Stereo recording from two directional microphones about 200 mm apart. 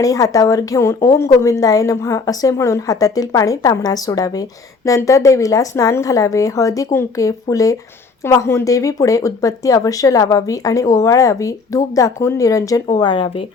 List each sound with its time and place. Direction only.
0.0 s speech: 15° left (ahead or behind)